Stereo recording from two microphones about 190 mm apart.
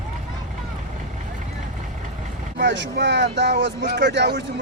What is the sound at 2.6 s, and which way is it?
Speech, 65° right (ahead or behind).